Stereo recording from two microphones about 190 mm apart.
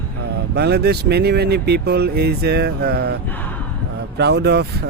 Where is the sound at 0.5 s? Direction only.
60° right (ahead or behind).